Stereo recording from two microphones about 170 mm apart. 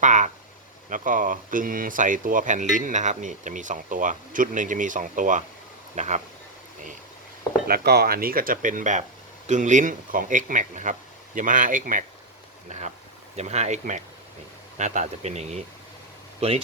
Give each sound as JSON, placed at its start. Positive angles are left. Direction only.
{"t": 0.0, "sound": "speech", "side_deg": -45}
{"t": 7.7, "sound": "speech", "side_deg": -65}
{"t": 13.3, "sound": "speech", "side_deg": -40}